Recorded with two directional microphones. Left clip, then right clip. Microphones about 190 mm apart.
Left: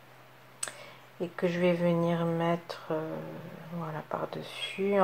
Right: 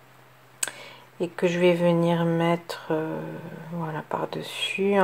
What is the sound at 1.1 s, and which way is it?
Speech, 35° right (ahead or behind).